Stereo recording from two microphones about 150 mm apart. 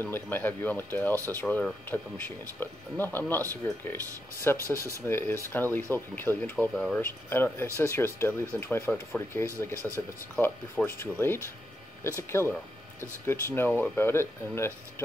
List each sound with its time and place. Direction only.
0.0 s speech: 15° left (ahead or behind)
4.7 s speech: 20° right (ahead or behind)
5.0 s speech: 15° left (ahead or behind)
7.0 s speech: 15° left (ahead or behind)
9.8 s speech: centre (ahead or behind)
10.4 s speech: 15° left (ahead or behind)
13.6 s speech: 10° left (ahead or behind)